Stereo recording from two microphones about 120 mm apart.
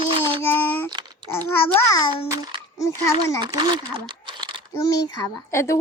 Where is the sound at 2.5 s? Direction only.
45° right (ahead or behind).